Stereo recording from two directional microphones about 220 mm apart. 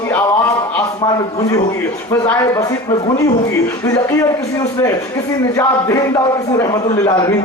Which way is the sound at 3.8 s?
15° left (ahead or behind).